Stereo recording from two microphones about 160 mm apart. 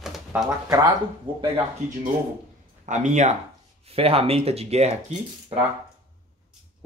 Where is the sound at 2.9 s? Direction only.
50° right (ahead or behind).